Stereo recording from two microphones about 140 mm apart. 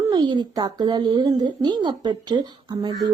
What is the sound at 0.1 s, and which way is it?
Speech, 30° right (ahead or behind).